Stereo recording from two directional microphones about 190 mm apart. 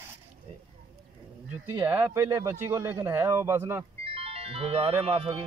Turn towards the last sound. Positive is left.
turn(degrees=-30)  # may be behind; listen again after turning